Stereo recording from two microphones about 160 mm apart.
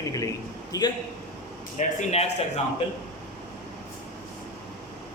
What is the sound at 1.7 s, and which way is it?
Speech, 40° left (ahead or behind).